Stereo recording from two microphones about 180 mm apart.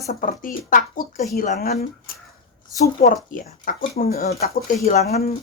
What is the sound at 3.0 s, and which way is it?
Speech, 45° left (ahead or behind).